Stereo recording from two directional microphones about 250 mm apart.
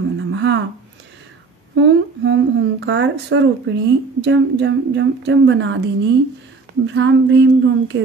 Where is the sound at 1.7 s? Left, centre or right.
Right.